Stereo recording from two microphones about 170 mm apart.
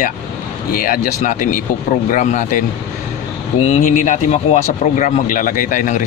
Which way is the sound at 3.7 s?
45° left (ahead or behind).